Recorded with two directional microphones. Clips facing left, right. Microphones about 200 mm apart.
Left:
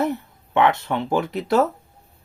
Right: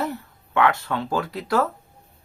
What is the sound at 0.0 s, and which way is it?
Speech, 20° left (ahead or behind).